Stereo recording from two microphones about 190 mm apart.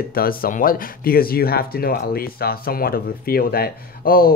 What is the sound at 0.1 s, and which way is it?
Speech, 50° left (ahead or behind).